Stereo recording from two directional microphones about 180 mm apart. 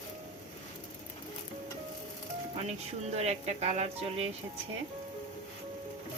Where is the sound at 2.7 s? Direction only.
35° right (ahead or behind).